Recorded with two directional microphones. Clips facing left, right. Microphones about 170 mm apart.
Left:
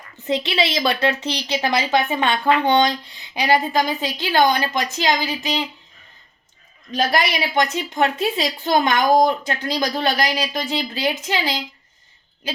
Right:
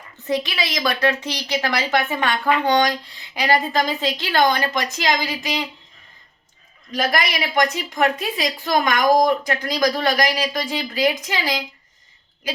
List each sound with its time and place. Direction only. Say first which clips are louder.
0.3 s a woman's voice: left 2 dB; 25° left (ahead or behind)
6.9 s a woman's voice: left 2 dB; 25° left (ahead or behind)